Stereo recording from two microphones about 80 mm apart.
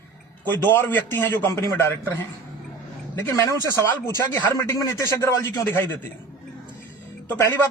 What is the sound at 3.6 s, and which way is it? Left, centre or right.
Speech, right.